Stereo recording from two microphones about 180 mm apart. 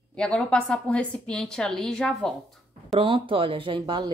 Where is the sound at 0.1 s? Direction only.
5° left (ahead or behind).